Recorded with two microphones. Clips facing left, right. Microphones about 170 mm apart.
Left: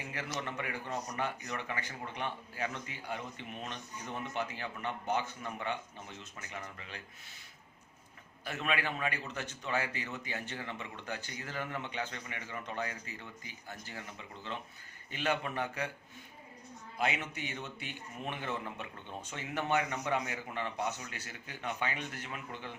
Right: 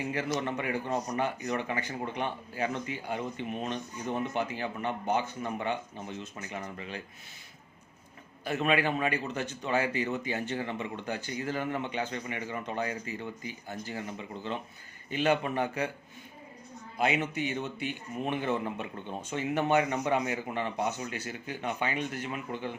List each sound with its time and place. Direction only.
0.1 s a man's voice: 20° right (ahead or behind)
8.4 s a man's voice: 20° right (ahead or behind)
17.0 s a man's voice: 20° right (ahead or behind)